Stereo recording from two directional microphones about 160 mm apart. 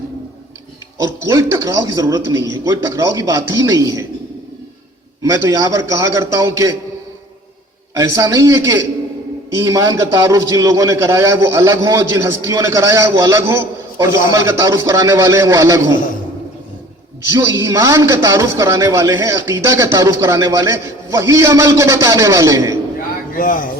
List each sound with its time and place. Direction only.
0.9 s a man's voice: 20° right (ahead or behind)
5.2 s a man's voice: 20° right (ahead or behind)
7.9 s a man's voice: 20° right (ahead or behind)
17.3 s a man's voice: 20° right (ahead or behind)
23.3 s speech: 60° left (ahead or behind)